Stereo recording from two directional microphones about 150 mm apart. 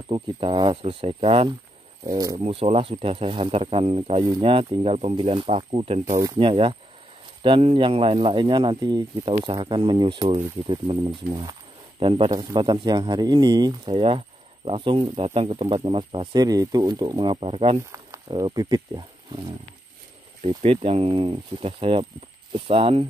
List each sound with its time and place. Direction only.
0.1 s speech: 35° right (ahead or behind)
2.0 s speech: 25° right (ahead or behind)
2.3 s speech: 40° right (ahead or behind)
6.1 s speech: 25° right (ahead or behind)
6.4 s speech: 35° right (ahead or behind)
18.3 s speech: 25° right (ahead or behind)